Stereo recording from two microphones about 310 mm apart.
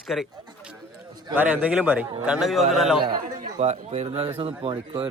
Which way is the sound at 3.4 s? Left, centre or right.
Right.